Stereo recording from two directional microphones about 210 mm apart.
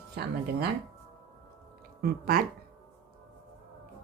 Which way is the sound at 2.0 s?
45° right (ahead or behind).